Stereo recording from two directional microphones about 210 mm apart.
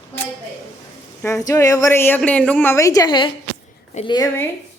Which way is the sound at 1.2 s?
15° left (ahead or behind).